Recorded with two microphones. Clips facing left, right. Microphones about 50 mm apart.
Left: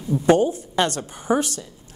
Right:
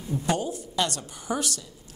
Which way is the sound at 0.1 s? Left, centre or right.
Left.